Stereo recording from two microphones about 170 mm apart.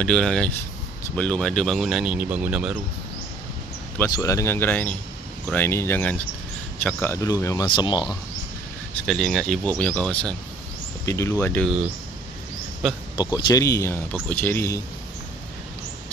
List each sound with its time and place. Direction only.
0.0 s speech: 5° left (ahead or behind)
4.1 s speech: 20° left (ahead or behind)
9.0 s speech: centre (ahead or behind)
11.1 s speech: 15° left (ahead or behind)
12.8 s speech: centre (ahead or behind)
13.5 s speech: 20° left (ahead or behind)